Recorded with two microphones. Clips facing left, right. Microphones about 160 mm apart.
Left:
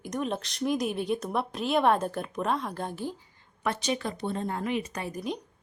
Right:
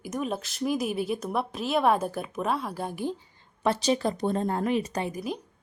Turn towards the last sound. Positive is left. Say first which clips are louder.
# right 1 dB
turn(degrees=-5)  # may be behind; listen again after turning